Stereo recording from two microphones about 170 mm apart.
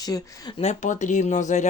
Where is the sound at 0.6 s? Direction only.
45° left (ahead or behind).